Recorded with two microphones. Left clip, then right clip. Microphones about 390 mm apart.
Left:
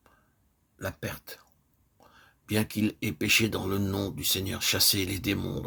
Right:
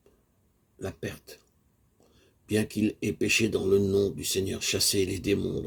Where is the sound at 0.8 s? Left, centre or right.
Left.